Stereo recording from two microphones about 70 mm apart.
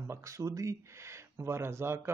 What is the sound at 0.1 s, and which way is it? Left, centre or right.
Speech, right.